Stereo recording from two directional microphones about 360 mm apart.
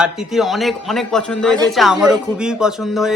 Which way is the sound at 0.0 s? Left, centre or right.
Centre.